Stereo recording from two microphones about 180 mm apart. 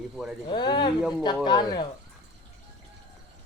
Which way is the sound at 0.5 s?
25° left (ahead or behind).